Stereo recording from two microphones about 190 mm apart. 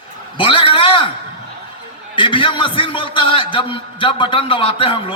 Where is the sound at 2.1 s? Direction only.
25° left (ahead or behind).